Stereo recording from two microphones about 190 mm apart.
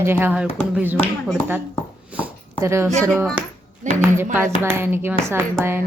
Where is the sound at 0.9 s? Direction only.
5° left (ahead or behind).